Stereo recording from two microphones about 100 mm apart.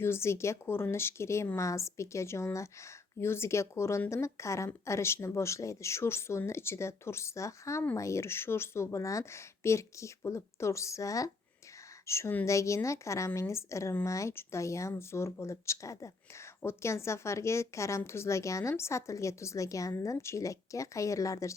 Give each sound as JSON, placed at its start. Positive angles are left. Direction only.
{"t": 0.0, "sound": "a woman's voice", "side_deg": 25}